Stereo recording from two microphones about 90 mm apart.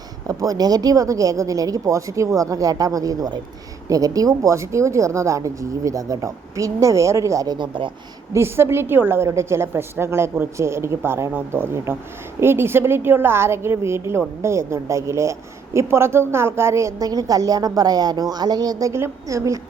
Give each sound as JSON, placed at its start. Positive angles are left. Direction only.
{"t": 0.3, "sound": "speech", "side_deg": -40}
{"t": 8.3, "sound": "a woman's voice", "side_deg": -30}